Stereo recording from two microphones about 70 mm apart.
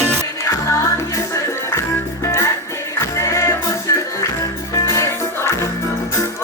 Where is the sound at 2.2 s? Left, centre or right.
Left.